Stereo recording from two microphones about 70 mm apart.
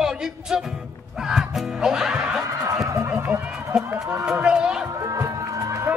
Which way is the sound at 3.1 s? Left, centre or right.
Right.